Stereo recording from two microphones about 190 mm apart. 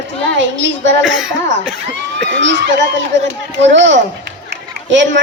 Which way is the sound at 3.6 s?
70° right (ahead or behind).